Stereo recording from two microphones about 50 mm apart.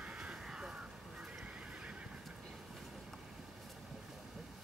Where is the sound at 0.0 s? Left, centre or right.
Right.